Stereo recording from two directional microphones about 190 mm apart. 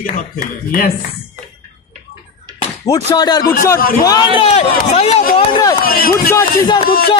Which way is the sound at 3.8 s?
50° left (ahead or behind).